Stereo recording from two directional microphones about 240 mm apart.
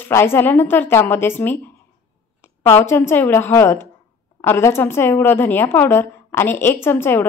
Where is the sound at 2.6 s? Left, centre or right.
Centre.